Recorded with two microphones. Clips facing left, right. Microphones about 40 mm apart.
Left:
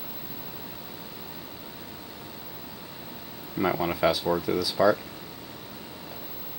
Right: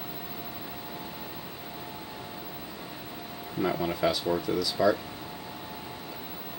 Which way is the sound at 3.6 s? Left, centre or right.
Centre.